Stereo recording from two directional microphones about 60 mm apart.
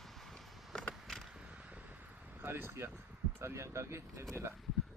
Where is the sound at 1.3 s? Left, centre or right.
Centre.